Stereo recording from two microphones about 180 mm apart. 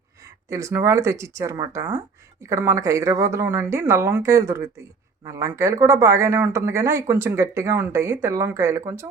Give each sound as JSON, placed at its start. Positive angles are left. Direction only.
{"t": 0.5, "sound": "speech", "side_deg": -15}